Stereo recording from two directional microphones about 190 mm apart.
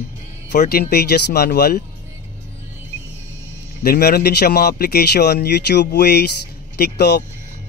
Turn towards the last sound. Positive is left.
turn(degrees=60)  # may be behind; listen again after turning